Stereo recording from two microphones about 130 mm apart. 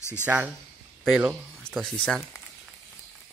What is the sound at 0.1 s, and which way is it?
Speech, 10° right (ahead or behind).